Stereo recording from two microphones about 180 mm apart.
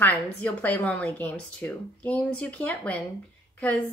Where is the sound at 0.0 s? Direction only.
10° left (ahead or behind).